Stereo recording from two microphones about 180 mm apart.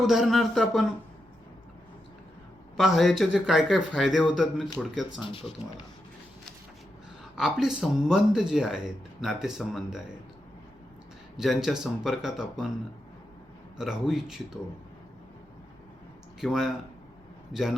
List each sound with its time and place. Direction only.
0.1 s speech: centre (ahead or behind)
2.7 s speech: centre (ahead or behind)
5.2 s speech: 30° left (ahead or behind)
7.3 s speech: centre (ahead or behind)
11.3 s speech: centre (ahead or behind)
13.7 s speech: centre (ahead or behind)
16.4 s speech: centre (ahead or behind)